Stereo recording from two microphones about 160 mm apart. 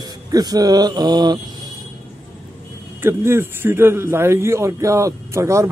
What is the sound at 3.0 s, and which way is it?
A man's voice, 15° right (ahead or behind).